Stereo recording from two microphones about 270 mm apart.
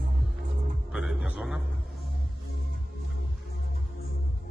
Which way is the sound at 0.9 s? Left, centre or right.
Centre.